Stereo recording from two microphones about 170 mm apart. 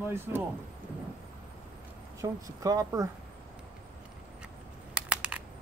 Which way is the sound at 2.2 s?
20° right (ahead or behind).